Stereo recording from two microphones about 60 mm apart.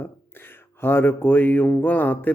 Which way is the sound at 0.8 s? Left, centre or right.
Left.